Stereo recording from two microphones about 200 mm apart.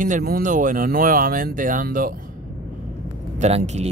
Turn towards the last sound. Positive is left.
turn(degrees=-35)  # may be behind; listen again after turning